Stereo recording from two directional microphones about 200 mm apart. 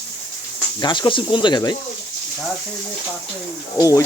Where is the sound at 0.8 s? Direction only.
20° left (ahead or behind).